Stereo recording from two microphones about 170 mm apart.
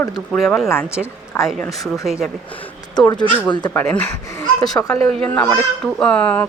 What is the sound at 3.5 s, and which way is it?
Speech, 25° left (ahead or behind).